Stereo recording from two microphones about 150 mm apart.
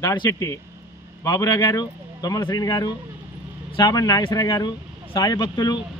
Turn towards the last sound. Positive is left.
turn(degrees=25)  # may be behind; listen again after turning